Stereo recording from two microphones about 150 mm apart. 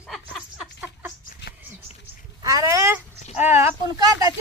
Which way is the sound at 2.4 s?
20° right (ahead or behind).